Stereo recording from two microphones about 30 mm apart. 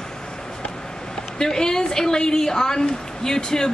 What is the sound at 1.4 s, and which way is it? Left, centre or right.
A woman's voice, left.